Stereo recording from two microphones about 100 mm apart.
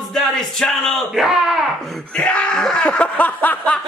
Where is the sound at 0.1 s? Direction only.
5° left (ahead or behind).